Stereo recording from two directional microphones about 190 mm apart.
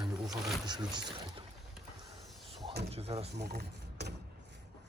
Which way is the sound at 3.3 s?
60° right (ahead or behind).